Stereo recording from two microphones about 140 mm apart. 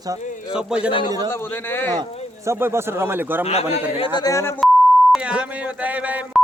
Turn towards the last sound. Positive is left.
turn(degrees=-10)  # may be behind; listen again after turning